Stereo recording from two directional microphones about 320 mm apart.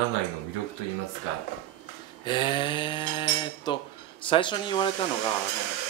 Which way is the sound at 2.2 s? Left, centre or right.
Centre.